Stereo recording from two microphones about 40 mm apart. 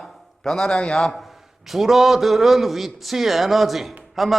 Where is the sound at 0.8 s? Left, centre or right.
Centre.